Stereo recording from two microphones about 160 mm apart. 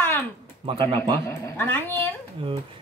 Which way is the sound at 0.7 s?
35° right (ahead or behind).